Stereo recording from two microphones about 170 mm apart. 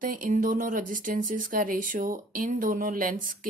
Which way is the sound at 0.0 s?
50° right (ahead or behind).